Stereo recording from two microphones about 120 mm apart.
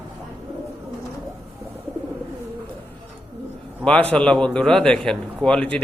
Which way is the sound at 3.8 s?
10° left (ahead or behind).